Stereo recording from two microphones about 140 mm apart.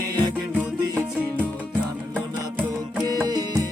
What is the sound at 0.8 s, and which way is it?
Music, 15° right (ahead or behind).